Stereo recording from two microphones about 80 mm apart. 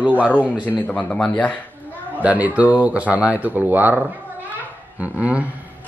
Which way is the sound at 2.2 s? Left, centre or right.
Centre.